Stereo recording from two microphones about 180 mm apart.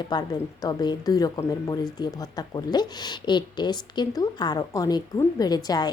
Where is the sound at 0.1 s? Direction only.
20° left (ahead or behind).